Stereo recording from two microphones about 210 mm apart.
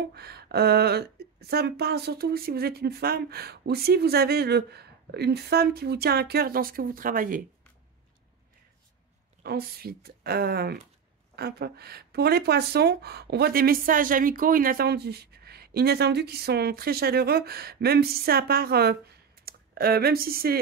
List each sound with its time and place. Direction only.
0.1 s speech: 50° right (ahead or behind)
9.4 s speech: 45° right (ahead or behind)